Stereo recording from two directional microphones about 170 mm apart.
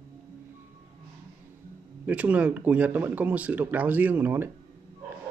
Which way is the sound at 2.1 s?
10° right (ahead or behind).